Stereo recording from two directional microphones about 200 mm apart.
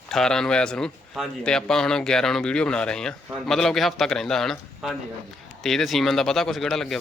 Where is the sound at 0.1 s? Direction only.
5° left (ahead or behind).